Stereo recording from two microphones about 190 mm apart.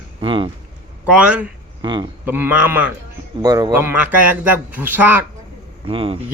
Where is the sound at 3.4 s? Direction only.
20° right (ahead or behind).